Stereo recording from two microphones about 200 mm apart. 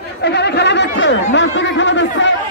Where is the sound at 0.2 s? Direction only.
55° left (ahead or behind).